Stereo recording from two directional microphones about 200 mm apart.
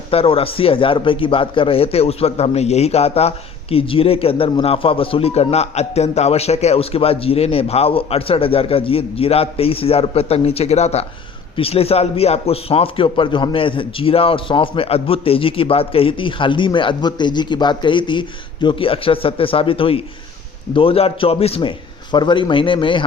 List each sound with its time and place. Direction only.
0.1 s speech: 30° left (ahead or behind)